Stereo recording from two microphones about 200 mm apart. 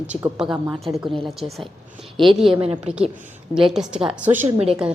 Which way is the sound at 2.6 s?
30° right (ahead or behind).